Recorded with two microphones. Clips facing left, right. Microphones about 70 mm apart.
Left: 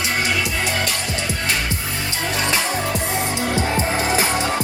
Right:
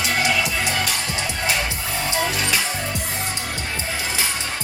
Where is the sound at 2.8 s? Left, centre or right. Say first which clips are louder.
Left 5 dB; left.